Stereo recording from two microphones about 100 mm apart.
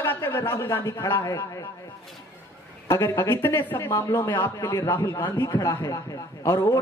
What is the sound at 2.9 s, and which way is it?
Speech, 25° left (ahead or behind).